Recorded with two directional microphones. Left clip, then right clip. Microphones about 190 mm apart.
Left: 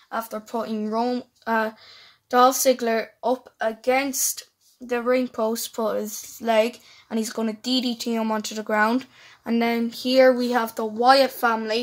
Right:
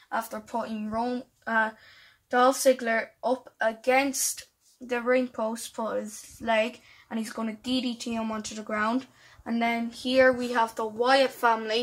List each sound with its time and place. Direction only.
0.1 s speech: 60° left (ahead or behind)
4.8 s speech: 60° left (ahead or behind)